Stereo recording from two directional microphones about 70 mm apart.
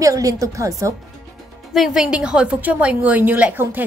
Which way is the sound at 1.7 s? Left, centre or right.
Centre.